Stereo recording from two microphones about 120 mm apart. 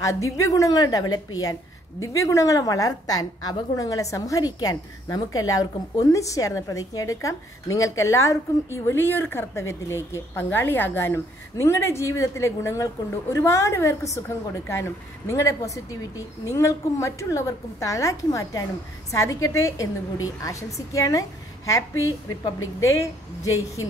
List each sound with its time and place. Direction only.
0.0 s a woman's voice: 25° left (ahead or behind)